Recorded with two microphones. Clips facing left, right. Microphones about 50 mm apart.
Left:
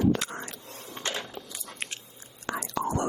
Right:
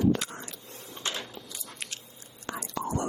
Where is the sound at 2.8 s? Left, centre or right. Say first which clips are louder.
Left 2 dB; left.